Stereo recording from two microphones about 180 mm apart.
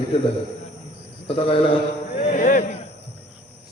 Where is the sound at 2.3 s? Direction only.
45° left (ahead or behind).